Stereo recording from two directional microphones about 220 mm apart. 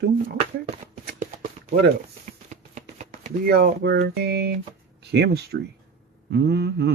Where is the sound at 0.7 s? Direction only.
35° right (ahead or behind).